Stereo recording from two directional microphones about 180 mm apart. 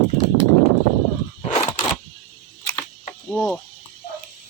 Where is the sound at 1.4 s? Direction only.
30° left (ahead or behind).